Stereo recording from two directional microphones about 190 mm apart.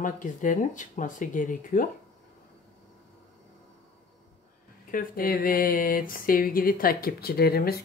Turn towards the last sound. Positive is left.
turn(degrees=55)  # may be behind; listen again after turning